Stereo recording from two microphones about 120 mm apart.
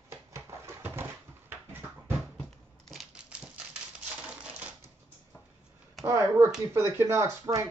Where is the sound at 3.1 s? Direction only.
10° right (ahead or behind).